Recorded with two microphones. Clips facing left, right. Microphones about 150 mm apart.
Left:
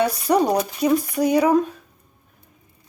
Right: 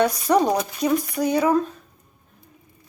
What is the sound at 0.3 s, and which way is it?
Speech, 10° left (ahead or behind).